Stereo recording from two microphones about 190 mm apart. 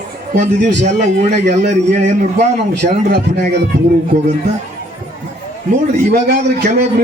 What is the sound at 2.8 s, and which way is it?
Speech, 50° right (ahead or behind).